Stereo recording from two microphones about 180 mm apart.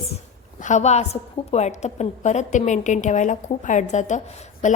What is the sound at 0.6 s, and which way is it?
A woman's voice, 40° left (ahead or behind).